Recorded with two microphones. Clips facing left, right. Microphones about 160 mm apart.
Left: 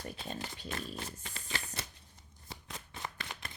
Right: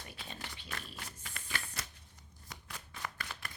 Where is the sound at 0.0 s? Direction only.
40° left (ahead or behind).